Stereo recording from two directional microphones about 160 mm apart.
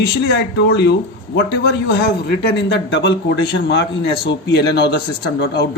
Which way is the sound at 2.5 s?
90° left.